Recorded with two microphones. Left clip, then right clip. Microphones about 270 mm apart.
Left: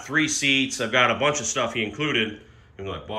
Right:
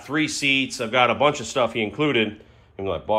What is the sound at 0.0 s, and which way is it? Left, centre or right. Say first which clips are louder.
A man's voice: even; centre.